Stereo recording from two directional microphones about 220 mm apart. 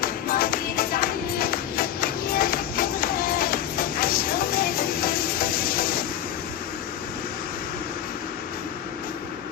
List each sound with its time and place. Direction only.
0.0 s music: 40° left (ahead or behind)